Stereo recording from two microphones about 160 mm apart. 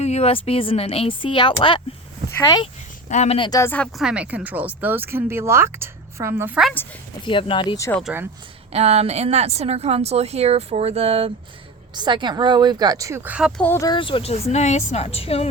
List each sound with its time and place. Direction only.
0.0 s a woman's voice: 40° left (ahead or behind); by 2.6 s 25° left (ahead or behind)
3.1 s a woman's voice: 40° left (ahead or behind)
3.6 s speech: 10° left (ahead or behind)
3.9 s speech: 5° right (ahead or behind)
7.3 s speech: 30° left (ahead or behind)
8.7 s speech: 40° right (ahead or behind); by 13.5 s 10° right (ahead or behind)
13.6 s speech: 10° left (ahead or behind)
13.8 s a woman's voice: 30° left (ahead or behind)